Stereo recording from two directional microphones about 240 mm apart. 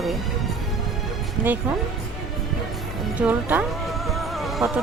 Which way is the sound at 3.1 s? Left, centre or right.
Centre.